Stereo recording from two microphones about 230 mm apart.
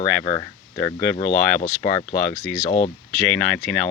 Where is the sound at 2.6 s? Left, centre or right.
Left.